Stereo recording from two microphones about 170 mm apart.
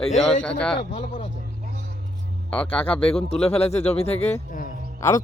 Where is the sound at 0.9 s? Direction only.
45° left (ahead or behind).